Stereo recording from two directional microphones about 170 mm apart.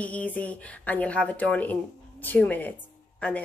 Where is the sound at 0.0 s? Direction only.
10° left (ahead or behind).